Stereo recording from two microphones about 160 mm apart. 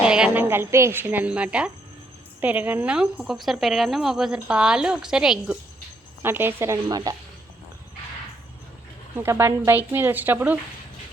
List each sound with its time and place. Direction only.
0.0 s a woman's voice: 5° right (ahead or behind); by 7.2 s 25° right (ahead or behind)
9.1 s speech: 15° right (ahead or behind)